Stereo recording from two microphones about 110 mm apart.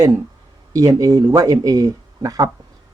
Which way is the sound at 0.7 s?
30° right (ahead or behind).